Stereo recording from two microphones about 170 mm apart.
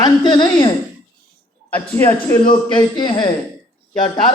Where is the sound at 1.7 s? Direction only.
20° left (ahead or behind).